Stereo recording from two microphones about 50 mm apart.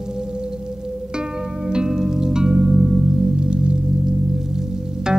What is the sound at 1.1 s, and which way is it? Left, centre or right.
Music, centre.